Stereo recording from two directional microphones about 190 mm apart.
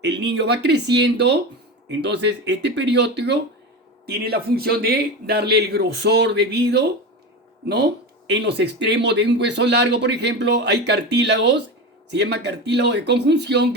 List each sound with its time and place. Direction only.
0.0 s speech: 65° right (ahead or behind)
8.3 s speech: 65° right (ahead or behind)